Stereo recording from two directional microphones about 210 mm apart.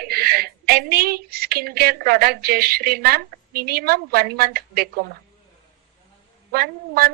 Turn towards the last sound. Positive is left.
turn(degrees=-45)  # may be behind; listen again after turning